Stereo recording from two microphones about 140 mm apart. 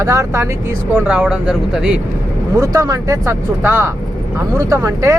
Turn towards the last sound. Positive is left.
turn(degrees=-20)  # may be behind; listen again after turning